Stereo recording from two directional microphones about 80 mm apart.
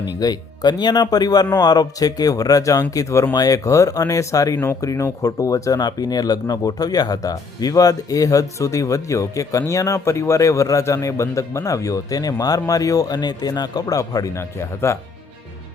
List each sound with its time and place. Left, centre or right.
0.2 s speech: left